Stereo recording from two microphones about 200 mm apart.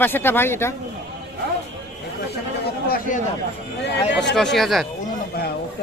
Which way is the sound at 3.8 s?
60° left (ahead or behind).